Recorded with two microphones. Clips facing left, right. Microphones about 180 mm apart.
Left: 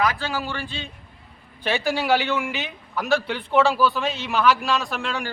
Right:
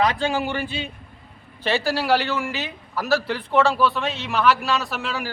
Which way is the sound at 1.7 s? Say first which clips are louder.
Right 1 dB; centre (ahead or behind).